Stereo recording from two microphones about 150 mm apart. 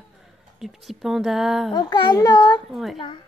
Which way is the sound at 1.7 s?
30° left (ahead or behind).